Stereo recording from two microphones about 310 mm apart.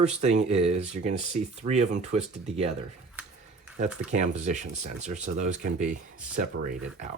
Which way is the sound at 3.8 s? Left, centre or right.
Right.